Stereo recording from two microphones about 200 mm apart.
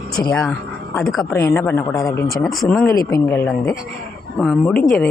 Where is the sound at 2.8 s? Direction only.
15° left (ahead or behind).